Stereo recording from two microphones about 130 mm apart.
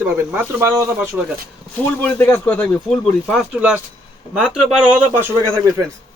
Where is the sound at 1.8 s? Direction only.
15° left (ahead or behind).